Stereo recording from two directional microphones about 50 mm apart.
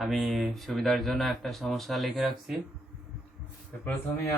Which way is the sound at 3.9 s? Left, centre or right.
Left.